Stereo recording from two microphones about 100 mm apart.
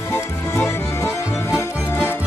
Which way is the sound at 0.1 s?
25° left (ahead or behind).